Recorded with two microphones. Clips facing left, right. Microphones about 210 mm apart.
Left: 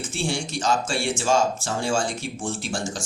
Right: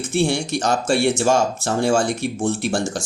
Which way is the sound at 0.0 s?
65° right (ahead or behind).